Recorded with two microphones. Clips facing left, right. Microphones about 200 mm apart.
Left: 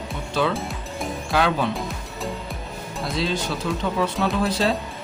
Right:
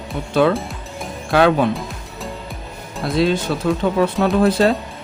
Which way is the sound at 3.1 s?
55° right (ahead or behind).